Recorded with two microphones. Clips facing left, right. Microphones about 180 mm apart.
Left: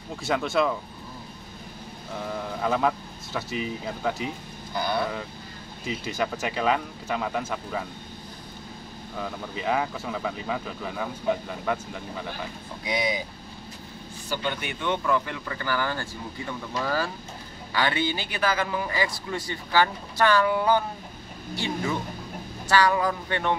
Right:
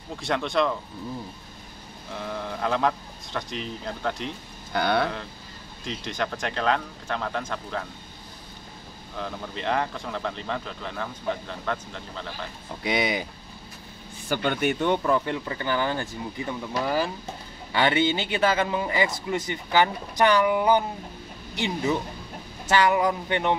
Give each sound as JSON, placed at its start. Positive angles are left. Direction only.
{"t": 0.2, "sound": "speech", "side_deg": 5}
{"t": 2.1, "sound": "speech", "side_deg": 5}
{"t": 4.7, "sound": "speech", "side_deg": -65}
{"t": 5.9, "sound": "speech", "side_deg": 5}
{"t": 9.1, "sound": "speech", "side_deg": 5}
{"t": 12.8, "sound": "speech", "side_deg": -65}
{"t": 14.3, "sound": "a man's voice", "side_deg": -50}